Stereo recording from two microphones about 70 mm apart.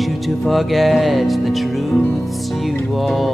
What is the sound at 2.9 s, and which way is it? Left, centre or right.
Mantra, centre.